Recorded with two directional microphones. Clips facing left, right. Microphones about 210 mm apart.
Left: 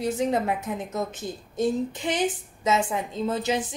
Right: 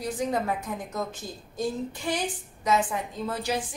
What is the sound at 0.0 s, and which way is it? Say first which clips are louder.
A woman's voice: left 4 dB; 25° left (ahead or behind).